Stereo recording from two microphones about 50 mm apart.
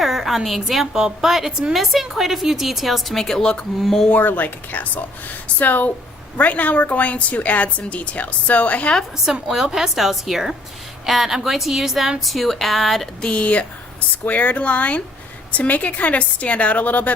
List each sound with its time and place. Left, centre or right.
0.0 s a woman's voice: centre
3.4 s speech: centre
3.8 s speech: centre
4.1 s a woman's voice: left
9.3 s a woman's voice: centre
13.2 s a woman's voice: left